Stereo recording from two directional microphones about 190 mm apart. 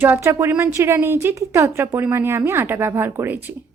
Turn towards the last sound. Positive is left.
turn(degrees=-10)  # may be behind; listen again after turning